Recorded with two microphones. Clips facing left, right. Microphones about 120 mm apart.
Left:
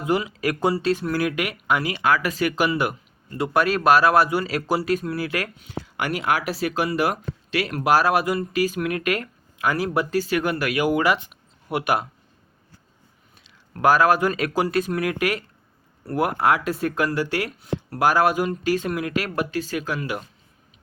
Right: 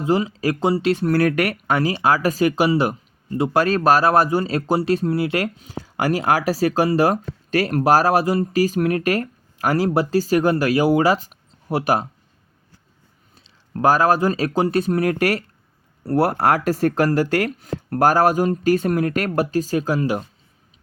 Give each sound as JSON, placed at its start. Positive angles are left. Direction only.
{"t": 0.0, "sound": "speech", "side_deg": -35}
{"t": 1.1, "sound": "speech", "side_deg": -60}
{"t": 1.6, "sound": "speech", "side_deg": -35}
{"t": 13.3, "sound": "speech", "side_deg": -30}